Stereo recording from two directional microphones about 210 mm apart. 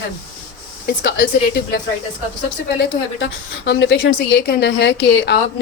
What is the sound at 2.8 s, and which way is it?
A woman's voice, 55° left (ahead or behind).